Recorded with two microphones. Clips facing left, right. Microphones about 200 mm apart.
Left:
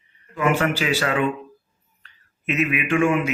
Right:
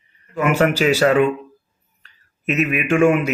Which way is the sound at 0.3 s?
40° right (ahead or behind).